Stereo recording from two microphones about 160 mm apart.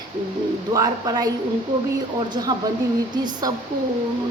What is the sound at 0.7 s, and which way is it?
Speech, 20° right (ahead or behind).